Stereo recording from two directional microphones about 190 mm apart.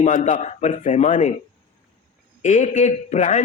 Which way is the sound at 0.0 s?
40° left (ahead or behind).